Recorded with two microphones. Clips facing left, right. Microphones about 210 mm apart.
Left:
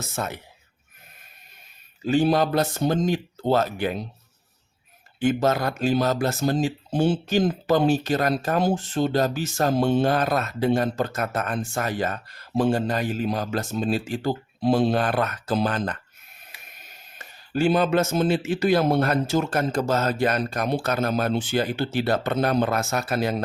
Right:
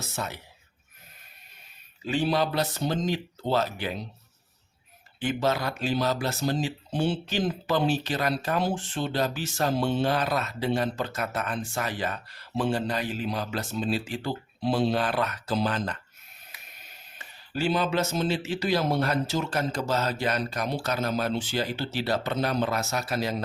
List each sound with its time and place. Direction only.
0.2 s speech: 50° left (ahead or behind)
2.0 s speech: 45° left (ahead or behind)
5.2 s speech: 45° left (ahead or behind)
17.2 s speech: 50° left (ahead or behind)